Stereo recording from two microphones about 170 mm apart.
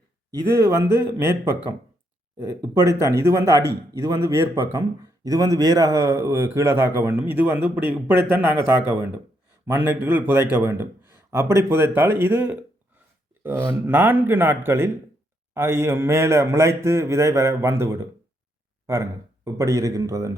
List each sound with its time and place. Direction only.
0.3 s a man's voice: 15° right (ahead or behind)
19.5 s speech: 20° right (ahead or behind)